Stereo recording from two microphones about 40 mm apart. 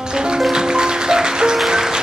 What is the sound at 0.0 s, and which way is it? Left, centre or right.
Music, centre.